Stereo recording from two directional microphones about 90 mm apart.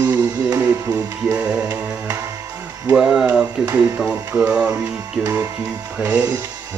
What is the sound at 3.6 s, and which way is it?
Speech, 20° right (ahead or behind).